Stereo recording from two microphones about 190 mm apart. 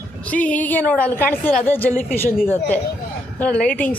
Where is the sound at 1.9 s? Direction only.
45° left (ahead or behind).